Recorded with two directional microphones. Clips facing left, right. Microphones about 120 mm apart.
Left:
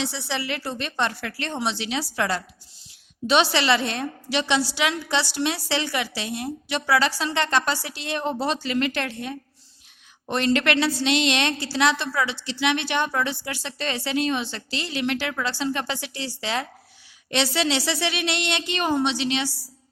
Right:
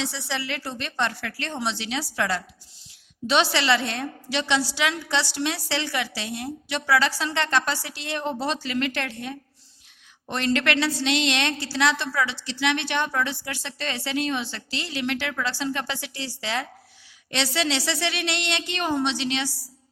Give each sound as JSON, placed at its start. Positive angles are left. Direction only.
{"t": 0.0, "sound": "a woman's voice", "side_deg": 20}
{"t": 13.1, "sound": "a woman's voice", "side_deg": 20}